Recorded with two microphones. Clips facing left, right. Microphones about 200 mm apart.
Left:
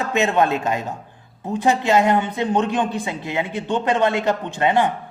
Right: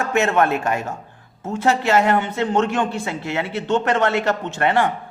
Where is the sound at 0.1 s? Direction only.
15° left (ahead or behind).